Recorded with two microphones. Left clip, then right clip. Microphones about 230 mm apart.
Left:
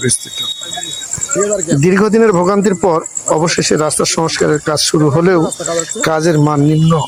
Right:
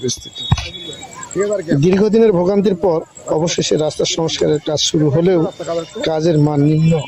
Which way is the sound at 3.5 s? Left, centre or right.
Centre.